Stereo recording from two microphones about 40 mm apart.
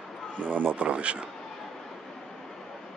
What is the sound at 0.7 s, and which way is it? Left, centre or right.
Speech, right.